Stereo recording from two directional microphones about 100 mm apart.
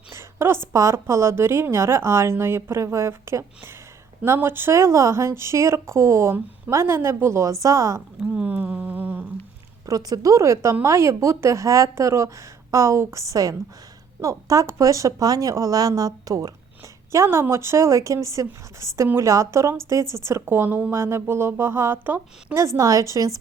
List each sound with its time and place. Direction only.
0.1 s a woman's voice: 25° right (ahead or behind)
8.2 s a sound: 15° right (ahead or behind)
9.8 s a woman's voice: 35° right (ahead or behind); by 22.6 s 20° right (ahead or behind)
22.6 s speech: 35° right (ahead or behind)